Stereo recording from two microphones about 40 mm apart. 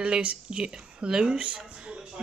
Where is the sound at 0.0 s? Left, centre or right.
Right.